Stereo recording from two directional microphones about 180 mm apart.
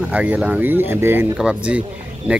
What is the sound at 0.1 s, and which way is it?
Speech, 5° right (ahead or behind).